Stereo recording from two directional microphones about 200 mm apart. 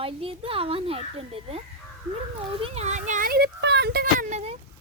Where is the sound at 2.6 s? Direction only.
35° right (ahead or behind); by 4.2 s 50° right (ahead or behind).